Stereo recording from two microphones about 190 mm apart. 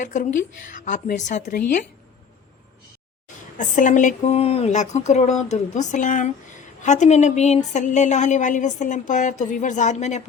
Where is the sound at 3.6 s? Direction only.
40° left (ahead or behind).